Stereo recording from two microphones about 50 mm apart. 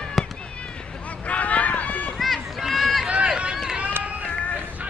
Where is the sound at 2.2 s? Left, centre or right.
Centre.